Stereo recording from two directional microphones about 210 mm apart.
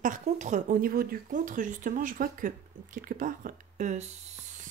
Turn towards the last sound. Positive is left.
turn(degrees=-35)  # may be behind; listen again after turning